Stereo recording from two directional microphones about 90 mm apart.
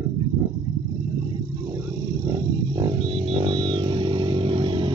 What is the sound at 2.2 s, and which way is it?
Wild animals, 40° right (ahead or behind).